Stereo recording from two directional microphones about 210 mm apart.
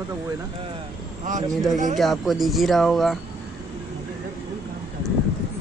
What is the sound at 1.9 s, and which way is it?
Speech, centre (ahead or behind).